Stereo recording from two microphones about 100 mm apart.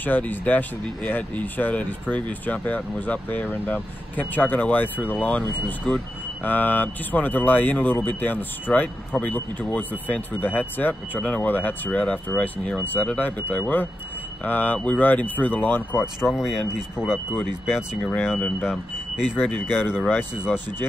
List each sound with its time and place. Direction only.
0.0 s speech: 20° left (ahead or behind)
16.2 s speech: 5° right (ahead or behind)
19.2 s speech: 15° left (ahead or behind)